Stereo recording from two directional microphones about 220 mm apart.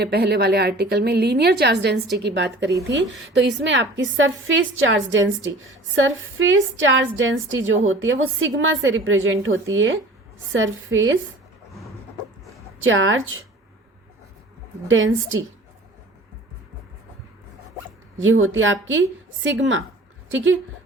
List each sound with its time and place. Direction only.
0.0 s a woman's voice: 45° right (ahead or behind)
12.8 s a woman's voice: 60° right (ahead or behind)
14.8 s a woman's voice: 60° right (ahead or behind)
18.2 s a woman's voice: 65° right (ahead or behind)